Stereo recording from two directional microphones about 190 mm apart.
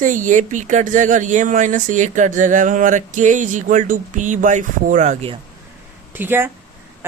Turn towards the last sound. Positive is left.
turn(degrees=-10)  # may be behind; listen again after turning